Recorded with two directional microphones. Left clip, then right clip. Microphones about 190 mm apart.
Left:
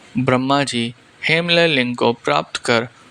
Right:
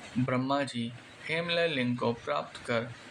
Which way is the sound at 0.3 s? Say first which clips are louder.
Left 14 dB; 50° left (ahead or behind).